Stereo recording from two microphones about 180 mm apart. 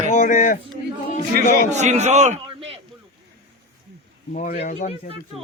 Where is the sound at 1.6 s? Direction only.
40° right (ahead or behind).